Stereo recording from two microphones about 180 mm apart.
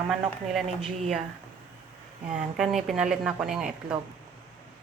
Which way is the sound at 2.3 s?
5° right (ahead or behind).